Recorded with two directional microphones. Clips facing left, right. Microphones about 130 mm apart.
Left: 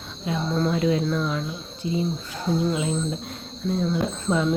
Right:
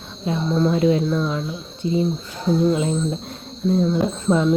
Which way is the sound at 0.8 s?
30° right (ahead or behind).